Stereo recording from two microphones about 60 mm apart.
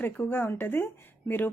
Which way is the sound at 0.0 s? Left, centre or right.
Left.